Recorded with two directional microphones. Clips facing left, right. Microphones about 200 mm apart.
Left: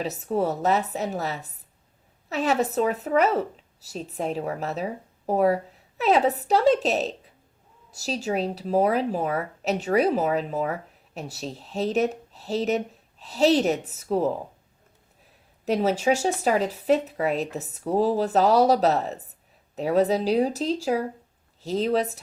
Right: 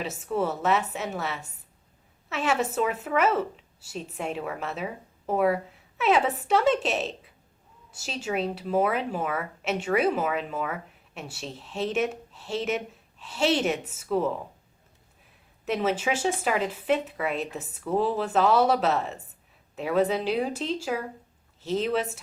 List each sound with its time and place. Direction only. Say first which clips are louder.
0.0 s a woman's voice: left 3 dB; 35° left (ahead or behind)
15.6 s a woman's voice: left 4 dB; 35° left (ahead or behind)